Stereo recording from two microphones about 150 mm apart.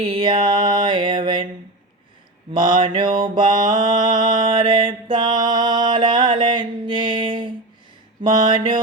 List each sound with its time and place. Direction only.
0.0 s music: 35° right (ahead or behind)
2.7 s mantra: 30° right (ahead or behind)